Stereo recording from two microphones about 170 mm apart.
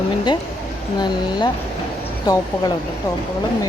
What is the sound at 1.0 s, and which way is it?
Speech, 25° left (ahead or behind).